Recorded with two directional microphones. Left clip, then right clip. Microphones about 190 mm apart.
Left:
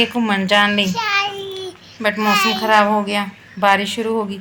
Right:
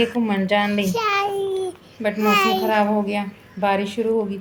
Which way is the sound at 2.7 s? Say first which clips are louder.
Left 5 dB; centre (ahead or behind).